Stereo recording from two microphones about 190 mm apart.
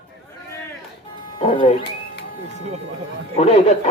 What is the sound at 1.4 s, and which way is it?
Speech, 30° left (ahead or behind).